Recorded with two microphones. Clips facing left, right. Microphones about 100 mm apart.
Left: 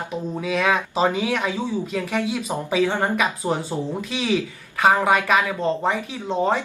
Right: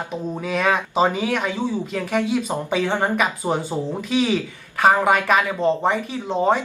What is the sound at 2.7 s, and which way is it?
Speech, centre (ahead or behind).